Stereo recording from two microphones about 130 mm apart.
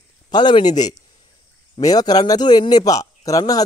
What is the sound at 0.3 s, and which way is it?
A man's voice, 35° left (ahead or behind).